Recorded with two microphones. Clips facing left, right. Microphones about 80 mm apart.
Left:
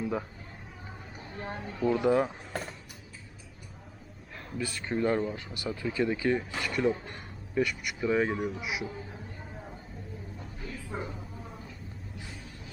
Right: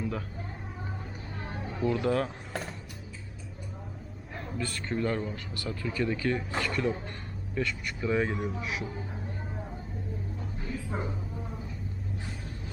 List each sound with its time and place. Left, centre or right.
0.0 s music: centre
1.8 s speech: centre
2.5 s music: centre
4.5 s speech: centre
4.9 s speech: centre
10.7 s dog: centre